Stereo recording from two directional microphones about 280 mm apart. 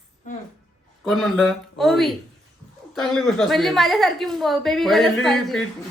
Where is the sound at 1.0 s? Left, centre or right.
Centre.